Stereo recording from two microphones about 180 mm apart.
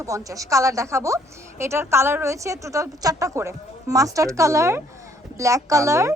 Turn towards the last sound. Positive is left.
turn(degrees=-15)  # may be behind; listen again after turning